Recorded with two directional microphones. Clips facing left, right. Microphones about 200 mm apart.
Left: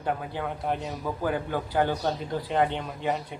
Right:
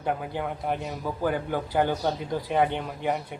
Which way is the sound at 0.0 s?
5° right (ahead or behind).